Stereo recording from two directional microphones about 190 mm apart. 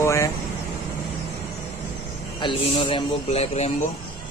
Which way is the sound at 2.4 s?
25° left (ahead or behind).